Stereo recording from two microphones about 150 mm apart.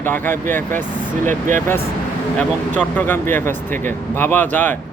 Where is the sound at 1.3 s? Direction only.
55° right (ahead or behind).